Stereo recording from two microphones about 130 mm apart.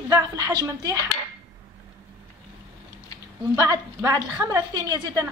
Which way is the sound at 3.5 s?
25° right (ahead or behind).